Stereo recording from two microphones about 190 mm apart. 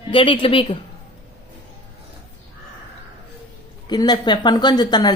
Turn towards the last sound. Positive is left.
turn(degrees=20)  # may be behind; listen again after turning